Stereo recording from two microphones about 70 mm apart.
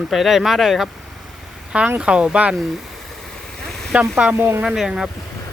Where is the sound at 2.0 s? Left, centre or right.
Centre.